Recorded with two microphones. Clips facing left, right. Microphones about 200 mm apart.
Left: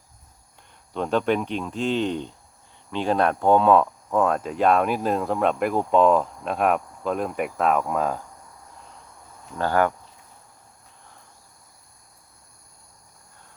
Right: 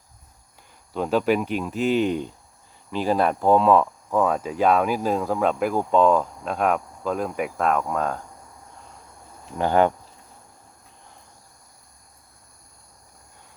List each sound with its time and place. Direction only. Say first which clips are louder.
0.9 s speech: right 1 dB; 5° right (ahead or behind)
9.6 s speech: right 2 dB; 20° right (ahead or behind)